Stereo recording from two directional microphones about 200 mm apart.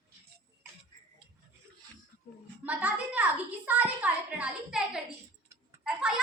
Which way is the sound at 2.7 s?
5° right (ahead or behind).